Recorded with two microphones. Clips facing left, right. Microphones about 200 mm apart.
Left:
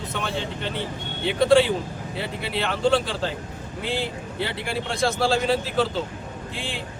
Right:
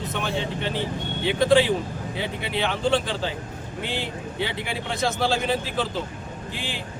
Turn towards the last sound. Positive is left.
turn(degrees=-5)  # may be behind; listen again after turning